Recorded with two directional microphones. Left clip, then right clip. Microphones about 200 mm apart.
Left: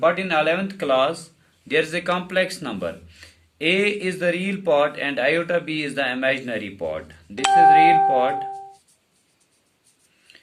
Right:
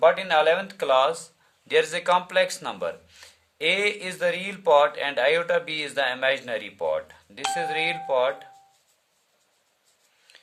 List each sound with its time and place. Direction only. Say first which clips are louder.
0.0 s speech: even; 55° right (ahead or behind)